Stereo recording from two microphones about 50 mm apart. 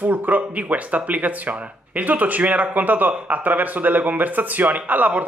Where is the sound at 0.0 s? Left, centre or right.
Right.